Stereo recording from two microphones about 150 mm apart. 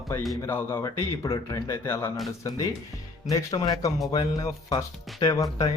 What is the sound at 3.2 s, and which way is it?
Speech, 25° left (ahead or behind).